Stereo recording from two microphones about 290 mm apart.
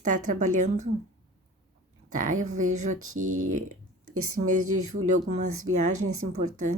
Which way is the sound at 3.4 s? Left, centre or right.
Right.